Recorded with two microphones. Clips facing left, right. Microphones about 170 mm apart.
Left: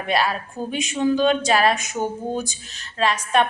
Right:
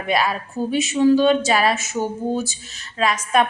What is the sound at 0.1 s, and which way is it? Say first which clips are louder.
A woman's voice: right 1 dB; 10° right (ahead or behind).